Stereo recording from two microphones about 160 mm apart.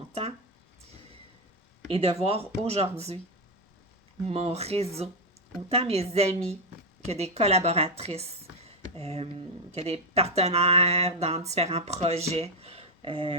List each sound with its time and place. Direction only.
0.1 s a sound: 40° right (ahead or behind)
1.9 s speech: 40° right (ahead or behind)
4.3 s speech: 40° right (ahead or behind)